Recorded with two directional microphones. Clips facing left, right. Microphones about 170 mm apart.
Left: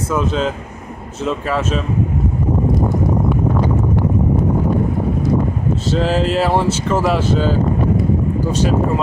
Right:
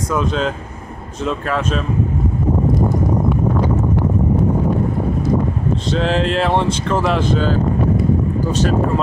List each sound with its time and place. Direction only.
0.1 s speech: 5° left (ahead or behind)
5.9 s speech: 5° left (ahead or behind)